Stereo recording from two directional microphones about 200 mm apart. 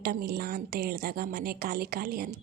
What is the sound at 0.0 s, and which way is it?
A woman's voice, 50° right (ahead or behind).